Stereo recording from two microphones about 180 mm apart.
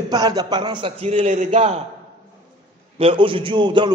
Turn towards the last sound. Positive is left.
turn(degrees=-25)  # may be behind; listen again after turning